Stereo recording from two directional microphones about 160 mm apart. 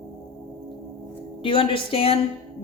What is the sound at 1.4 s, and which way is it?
Speech, 35° left (ahead or behind).